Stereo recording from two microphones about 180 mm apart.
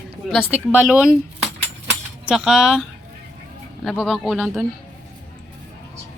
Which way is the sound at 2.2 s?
5° right (ahead or behind).